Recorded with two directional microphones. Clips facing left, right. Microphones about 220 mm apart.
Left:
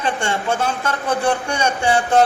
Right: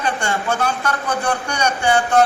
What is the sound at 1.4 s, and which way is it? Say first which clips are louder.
Speech: even; 25° left (ahead or behind).